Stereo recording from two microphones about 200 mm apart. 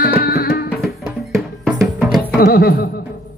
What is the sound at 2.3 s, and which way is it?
Music, 50° left (ahead or behind).